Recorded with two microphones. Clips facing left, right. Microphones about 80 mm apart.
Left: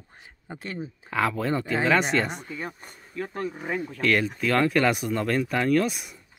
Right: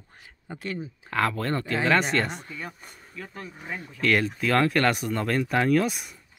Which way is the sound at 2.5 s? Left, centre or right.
Left.